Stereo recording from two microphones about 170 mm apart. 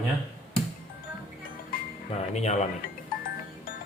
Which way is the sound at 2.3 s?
45° left (ahead or behind).